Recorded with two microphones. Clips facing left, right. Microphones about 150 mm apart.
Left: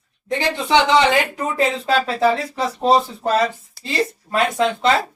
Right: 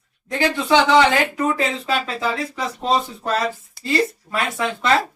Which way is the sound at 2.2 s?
30° left (ahead or behind).